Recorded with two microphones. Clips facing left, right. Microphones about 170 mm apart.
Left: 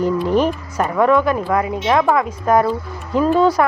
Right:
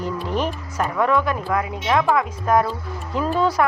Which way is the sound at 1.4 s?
45° left (ahead or behind).